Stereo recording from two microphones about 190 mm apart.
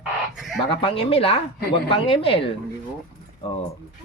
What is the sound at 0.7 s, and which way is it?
Speech, 30° left (ahead or behind).